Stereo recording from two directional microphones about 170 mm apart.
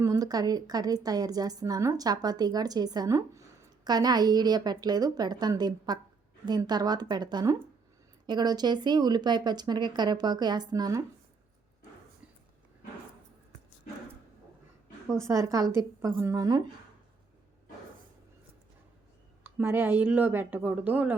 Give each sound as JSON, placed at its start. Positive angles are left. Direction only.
{"t": 0.0, "sound": "a woman's voice", "side_deg": -20}
{"t": 15.0, "sound": "a woman's voice", "side_deg": 5}
{"t": 15.3, "sound": "a woman's voice", "side_deg": -20}
{"t": 19.4, "sound": "speech", "side_deg": -15}